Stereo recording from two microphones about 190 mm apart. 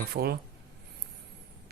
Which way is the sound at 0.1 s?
55° right (ahead or behind).